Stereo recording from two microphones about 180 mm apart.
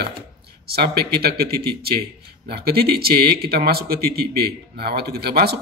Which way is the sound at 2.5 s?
60° right (ahead or behind).